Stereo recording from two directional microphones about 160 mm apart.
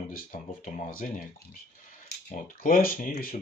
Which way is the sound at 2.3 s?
60° left (ahead or behind).